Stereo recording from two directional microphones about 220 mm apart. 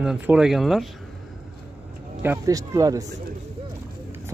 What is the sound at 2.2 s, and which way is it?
Speech, 10° right (ahead or behind).